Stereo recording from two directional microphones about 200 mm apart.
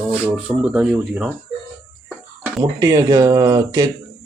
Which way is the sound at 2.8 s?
15° right (ahead or behind).